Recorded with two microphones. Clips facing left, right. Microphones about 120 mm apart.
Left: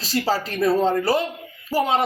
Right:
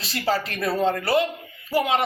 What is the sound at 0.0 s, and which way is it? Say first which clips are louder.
Speech: left 2 dB; 35° left (ahead or behind).